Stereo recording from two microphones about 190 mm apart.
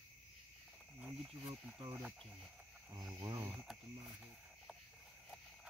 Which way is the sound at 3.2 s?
20° right (ahead or behind).